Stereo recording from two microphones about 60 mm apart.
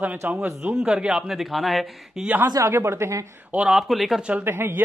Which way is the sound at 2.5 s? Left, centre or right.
Right.